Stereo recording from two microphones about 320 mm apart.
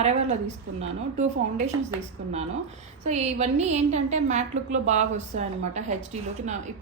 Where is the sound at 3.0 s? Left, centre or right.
Right.